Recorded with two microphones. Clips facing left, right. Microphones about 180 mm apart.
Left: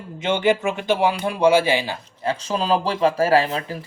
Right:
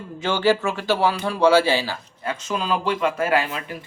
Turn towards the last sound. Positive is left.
turn(degrees=35)  # may be behind; listen again after turning